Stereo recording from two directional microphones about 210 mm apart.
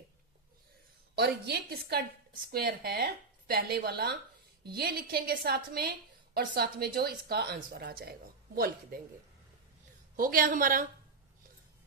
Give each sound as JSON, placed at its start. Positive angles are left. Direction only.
{"t": 1.1, "sound": "a woman's voice", "side_deg": -50}
{"t": 10.2, "sound": "a woman's voice", "side_deg": -45}